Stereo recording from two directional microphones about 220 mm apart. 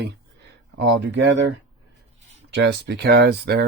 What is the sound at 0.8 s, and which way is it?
Speech, 50° right (ahead or behind).